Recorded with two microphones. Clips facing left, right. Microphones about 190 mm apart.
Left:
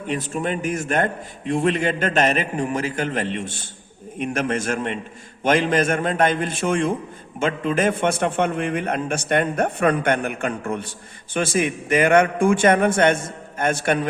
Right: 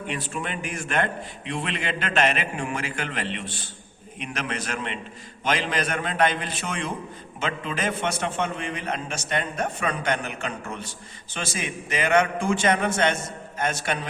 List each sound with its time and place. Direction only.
0.1 s a man's voice: 45° left (ahead or behind)